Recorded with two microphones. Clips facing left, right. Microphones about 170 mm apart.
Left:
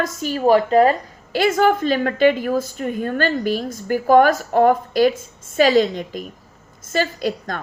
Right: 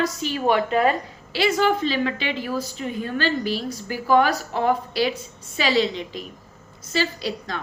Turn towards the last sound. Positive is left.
turn(degrees=50)  # may be behind; listen again after turning